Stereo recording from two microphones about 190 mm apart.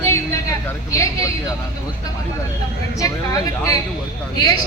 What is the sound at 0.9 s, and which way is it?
Speech, 15° left (ahead or behind).